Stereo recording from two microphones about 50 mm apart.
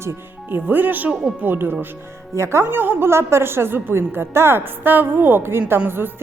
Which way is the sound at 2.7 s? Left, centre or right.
Right.